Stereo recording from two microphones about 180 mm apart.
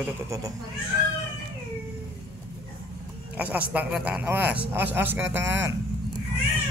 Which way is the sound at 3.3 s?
10° right (ahead or behind).